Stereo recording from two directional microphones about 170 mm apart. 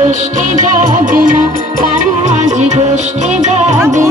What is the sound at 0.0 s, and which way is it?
Music, 45° right (ahead or behind).